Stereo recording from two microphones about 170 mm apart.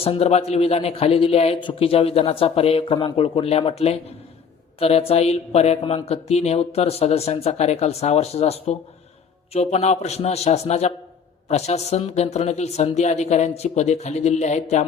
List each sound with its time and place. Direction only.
0.0 s speech: 35° left (ahead or behind)